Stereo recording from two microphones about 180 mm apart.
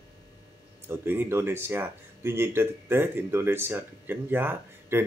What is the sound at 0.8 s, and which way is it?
Speech, 10° right (ahead or behind).